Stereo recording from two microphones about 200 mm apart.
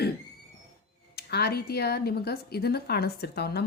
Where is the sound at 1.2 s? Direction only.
50° left (ahead or behind).